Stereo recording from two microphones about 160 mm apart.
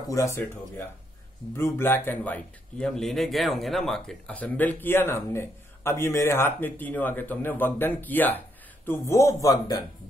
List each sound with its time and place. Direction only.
0.1 s a man's voice: 20° left (ahead or behind)